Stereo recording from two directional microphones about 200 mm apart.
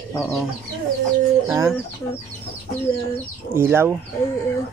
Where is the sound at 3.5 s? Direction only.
10° right (ahead or behind).